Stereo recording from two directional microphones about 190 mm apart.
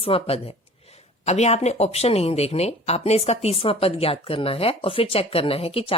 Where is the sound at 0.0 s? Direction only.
30° left (ahead or behind).